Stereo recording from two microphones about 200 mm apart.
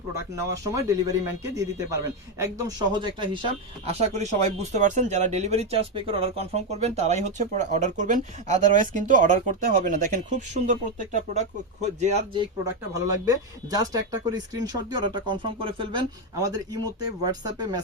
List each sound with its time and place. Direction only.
0.3 s speech: 15° right (ahead or behind)
2.4 s speech: 20° right (ahead or behind)
12.9 s speech: 15° right (ahead or behind)